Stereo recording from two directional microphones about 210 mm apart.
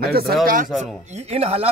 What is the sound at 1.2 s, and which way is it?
Speech, 30° right (ahead or behind).